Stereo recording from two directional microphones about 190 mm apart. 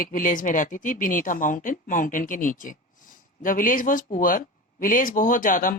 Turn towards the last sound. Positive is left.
turn(degrees=45)  # may be behind; listen again after turning